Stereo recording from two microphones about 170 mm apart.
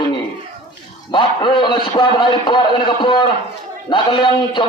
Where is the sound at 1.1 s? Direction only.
30° left (ahead or behind).